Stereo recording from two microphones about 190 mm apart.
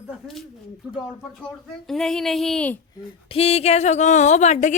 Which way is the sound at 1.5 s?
Centre (ahead or behind).